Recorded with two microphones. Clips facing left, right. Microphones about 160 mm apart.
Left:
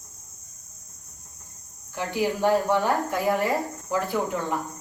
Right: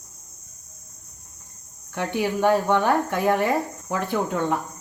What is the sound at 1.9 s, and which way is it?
Speech, 60° right (ahead or behind).